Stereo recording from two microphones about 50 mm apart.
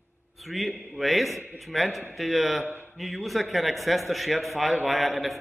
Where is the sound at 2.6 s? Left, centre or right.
Right.